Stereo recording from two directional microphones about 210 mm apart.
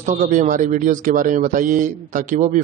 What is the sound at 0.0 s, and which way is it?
Speech, 35° right (ahead or behind).